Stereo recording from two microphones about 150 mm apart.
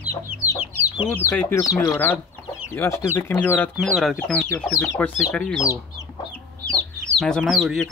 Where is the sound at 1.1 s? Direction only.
15° left (ahead or behind).